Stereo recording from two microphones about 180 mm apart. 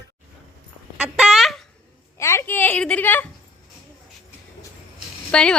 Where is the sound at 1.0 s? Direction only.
5° right (ahead or behind).